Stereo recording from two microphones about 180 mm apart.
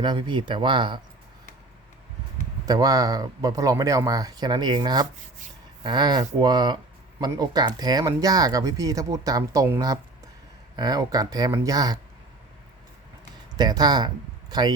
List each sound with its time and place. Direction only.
0.0 s speech: 25° right (ahead or behind)
2.6 s speech: 20° right (ahead or behind)
13.5 s speech: 20° right (ahead or behind)